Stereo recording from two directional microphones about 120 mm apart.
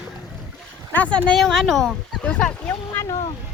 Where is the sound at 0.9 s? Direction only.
10° left (ahead or behind).